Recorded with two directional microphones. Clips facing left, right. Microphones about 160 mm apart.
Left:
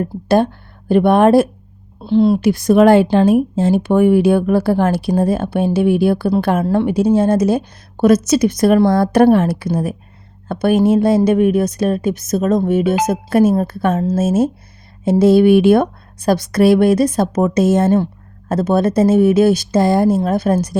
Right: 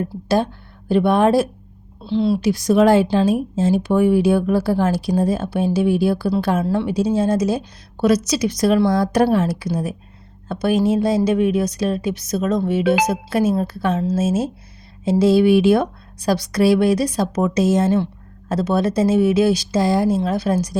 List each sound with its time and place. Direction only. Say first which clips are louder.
0.0 s a woman's voice: left 5 dB; 55° left (ahead or behind)